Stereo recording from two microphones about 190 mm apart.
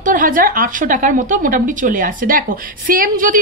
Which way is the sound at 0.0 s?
45° right (ahead or behind).